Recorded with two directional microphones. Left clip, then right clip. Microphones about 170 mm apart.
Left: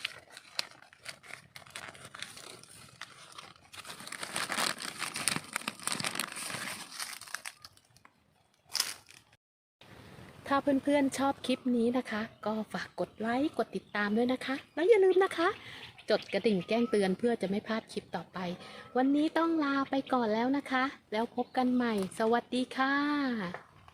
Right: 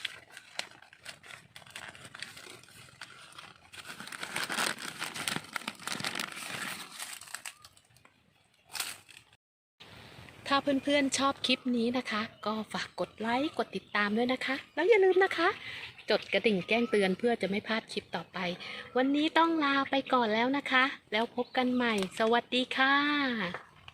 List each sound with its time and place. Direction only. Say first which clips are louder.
4.1 s crumpling: right 1 dB; 35° left (ahead or behind)
7.0 s crumpling: left 2 dB; 20° right (ahead or behind)
10.4 s speech: even; 50° left (ahead or behind)